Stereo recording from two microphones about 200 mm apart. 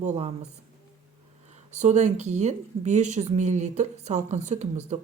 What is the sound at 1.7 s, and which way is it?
Speech, 35° right (ahead or behind).